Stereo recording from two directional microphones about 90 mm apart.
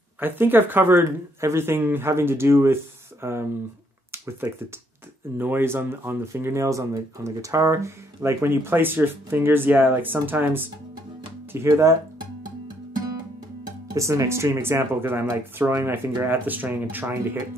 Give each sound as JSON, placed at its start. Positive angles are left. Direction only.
{"t": 0.2, "sound": "speech", "side_deg": -25}
{"t": 4.1, "sound": "a sound", "side_deg": -30}
{"t": 5.4, "sound": "speech", "side_deg": -25}
{"t": 11.5, "sound": "speech", "side_deg": -30}
{"t": 13.9, "sound": "speech", "side_deg": -35}